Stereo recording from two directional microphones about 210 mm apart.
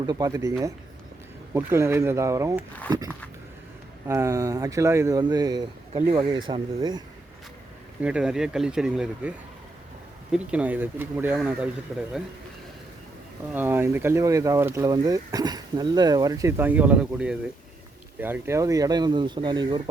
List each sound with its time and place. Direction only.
0.0 s speech: 20° right (ahead or behind)
4.0 s speech: 15° right (ahead or behind)
8.0 s speech: 5° right (ahead or behind)
10.3 s speech: 5° right (ahead or behind)
13.5 s speech: 10° right (ahead or behind)